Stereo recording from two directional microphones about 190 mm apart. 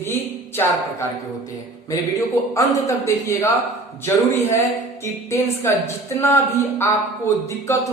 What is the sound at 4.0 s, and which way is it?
Speech, 10° left (ahead or behind).